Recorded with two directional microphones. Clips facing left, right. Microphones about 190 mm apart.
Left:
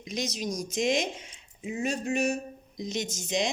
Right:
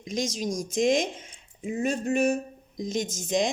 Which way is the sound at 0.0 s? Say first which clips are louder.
Right 3 dB; 40° right (ahead or behind).